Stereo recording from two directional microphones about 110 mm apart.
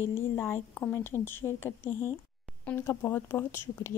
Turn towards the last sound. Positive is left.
turn(degrees=20)  # may be behind; listen again after turning